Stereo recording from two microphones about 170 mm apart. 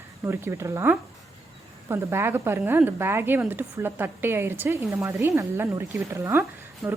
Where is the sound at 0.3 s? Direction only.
15° right (ahead or behind).